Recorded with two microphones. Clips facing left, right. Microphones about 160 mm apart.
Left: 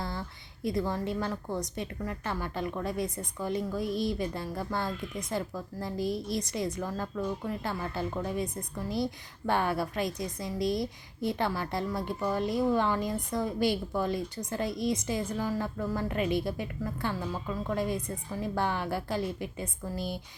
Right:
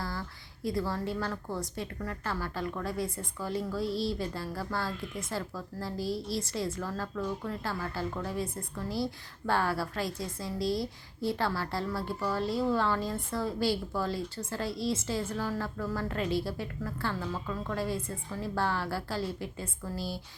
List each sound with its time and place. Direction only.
0.0 s a woman's voice: 20° left (ahead or behind)